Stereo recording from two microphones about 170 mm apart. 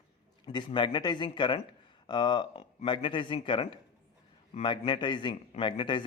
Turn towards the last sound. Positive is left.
turn(degrees=30)  # may be behind; listen again after turning